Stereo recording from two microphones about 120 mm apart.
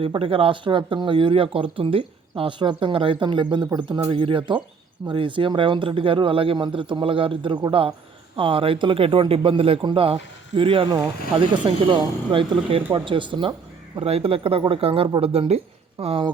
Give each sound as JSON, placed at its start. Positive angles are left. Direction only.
{"t": 0.0, "sound": "speech", "side_deg": -50}
{"t": 14.0, "sound": "speech", "side_deg": -55}